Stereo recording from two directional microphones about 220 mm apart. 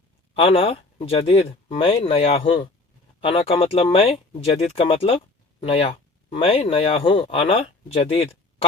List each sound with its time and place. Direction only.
0.3 s speech: 25° left (ahead or behind)